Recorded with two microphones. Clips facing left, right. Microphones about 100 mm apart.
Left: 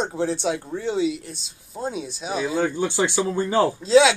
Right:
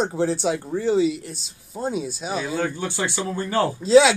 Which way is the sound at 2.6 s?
20° left (ahead or behind).